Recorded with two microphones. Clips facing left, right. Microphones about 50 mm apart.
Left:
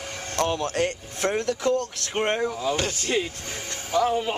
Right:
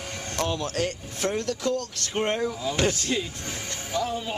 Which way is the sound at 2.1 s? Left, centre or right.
Centre.